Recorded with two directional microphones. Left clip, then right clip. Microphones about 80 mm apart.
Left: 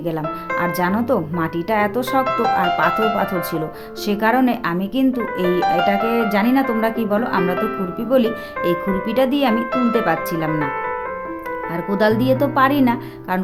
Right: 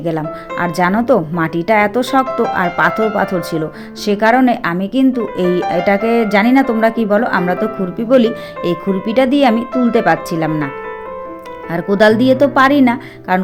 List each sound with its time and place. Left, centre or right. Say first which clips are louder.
0.0 s speech: right 4 dB; right
4.0 s speech: right 6 dB; right
5.4 s speech: right 1 dB; right
11.7 s speech: right 7 dB; right